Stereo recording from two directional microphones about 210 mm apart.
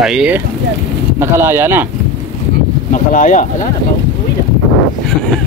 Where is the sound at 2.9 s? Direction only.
40° left (ahead or behind).